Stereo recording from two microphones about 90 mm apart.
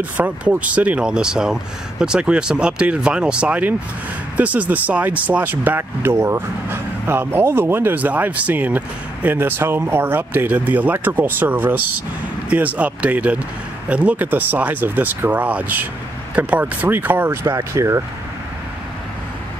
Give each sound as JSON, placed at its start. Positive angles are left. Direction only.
{"t": 0.2, "sound": "speech", "side_deg": -20}